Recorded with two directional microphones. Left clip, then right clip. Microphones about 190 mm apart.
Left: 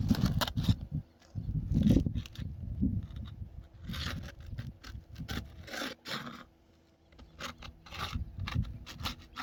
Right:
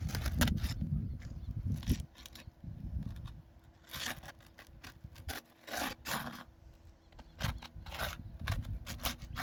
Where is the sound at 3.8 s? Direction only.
10° right (ahead or behind).